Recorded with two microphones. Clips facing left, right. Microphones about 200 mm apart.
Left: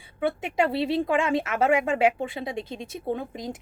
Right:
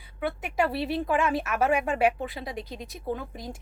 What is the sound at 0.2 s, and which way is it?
A woman's voice, 25° left (ahead or behind).